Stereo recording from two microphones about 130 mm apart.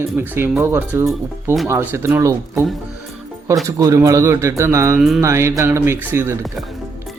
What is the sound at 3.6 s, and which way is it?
Speech, 25° right (ahead or behind).